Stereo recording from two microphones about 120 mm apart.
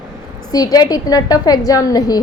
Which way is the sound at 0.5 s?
30° left (ahead or behind).